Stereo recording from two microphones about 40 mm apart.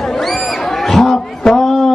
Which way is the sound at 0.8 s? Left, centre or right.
Centre.